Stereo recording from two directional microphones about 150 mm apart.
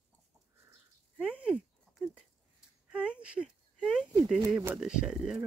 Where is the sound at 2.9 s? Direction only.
5° right (ahead or behind).